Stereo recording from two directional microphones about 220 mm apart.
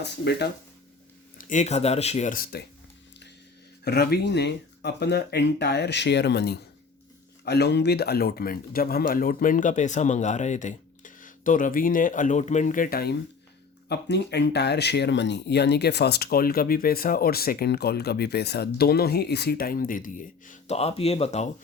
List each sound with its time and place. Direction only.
0.0 s speech: 50° left (ahead or behind)
1.4 s speech: 35° left (ahead or behind)
3.8 s speech: 45° left (ahead or behind); by 21.5 s 30° left (ahead or behind)